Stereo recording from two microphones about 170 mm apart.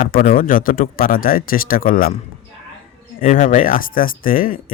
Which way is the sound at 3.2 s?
55° left (ahead or behind).